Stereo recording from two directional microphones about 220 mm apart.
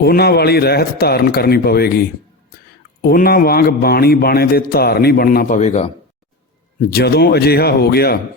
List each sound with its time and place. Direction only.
0.0 s a man's voice: 45° left (ahead or behind); by 5.9 s 30° left (ahead or behind)
6.9 s a man's voice: 45° left (ahead or behind)